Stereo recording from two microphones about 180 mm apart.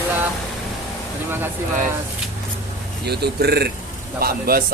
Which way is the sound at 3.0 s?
65° right (ahead or behind).